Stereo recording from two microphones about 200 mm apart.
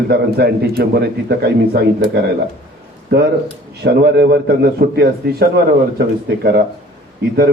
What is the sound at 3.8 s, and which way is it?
A man's voice, 55° right (ahead or behind).